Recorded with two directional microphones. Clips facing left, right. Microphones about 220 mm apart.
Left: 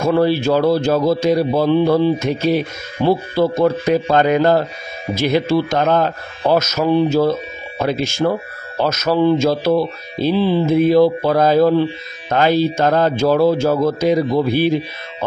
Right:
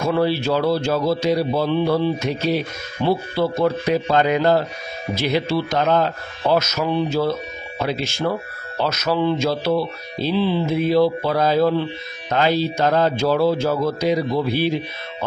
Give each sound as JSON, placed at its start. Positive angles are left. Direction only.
{"t": 0.0, "sound": "speech", "side_deg": 45}